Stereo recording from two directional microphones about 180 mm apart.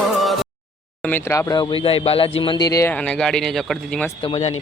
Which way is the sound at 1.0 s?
10° left (ahead or behind).